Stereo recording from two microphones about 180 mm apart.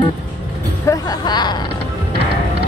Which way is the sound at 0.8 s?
25° left (ahead or behind).